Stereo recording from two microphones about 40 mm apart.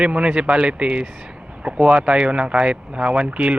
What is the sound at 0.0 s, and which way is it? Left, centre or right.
Speech, right.